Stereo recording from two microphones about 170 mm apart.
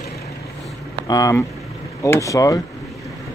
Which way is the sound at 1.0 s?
20° left (ahead or behind).